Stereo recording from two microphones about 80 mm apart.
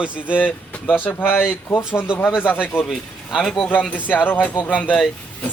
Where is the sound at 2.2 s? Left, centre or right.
Centre.